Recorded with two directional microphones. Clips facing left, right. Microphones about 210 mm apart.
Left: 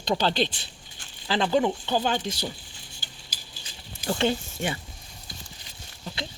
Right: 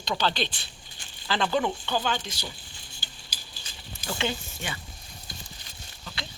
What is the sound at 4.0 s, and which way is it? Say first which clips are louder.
Speech: left 6 dB; 35° left (ahead or behind).